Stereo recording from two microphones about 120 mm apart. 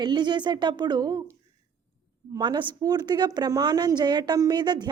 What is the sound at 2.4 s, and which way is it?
Speech, 40° right (ahead or behind).